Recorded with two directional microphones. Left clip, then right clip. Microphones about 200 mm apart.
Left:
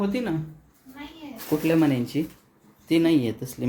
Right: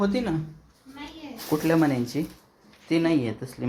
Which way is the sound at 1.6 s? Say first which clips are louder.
Left 1 dB; 20° left (ahead or behind).